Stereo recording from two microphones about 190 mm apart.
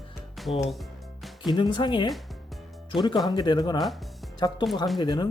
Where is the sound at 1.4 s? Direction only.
25° left (ahead or behind).